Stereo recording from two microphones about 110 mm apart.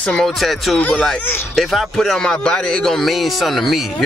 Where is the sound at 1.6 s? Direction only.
Centre (ahead or behind).